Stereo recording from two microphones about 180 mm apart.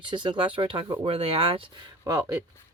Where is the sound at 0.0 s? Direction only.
25° right (ahead or behind).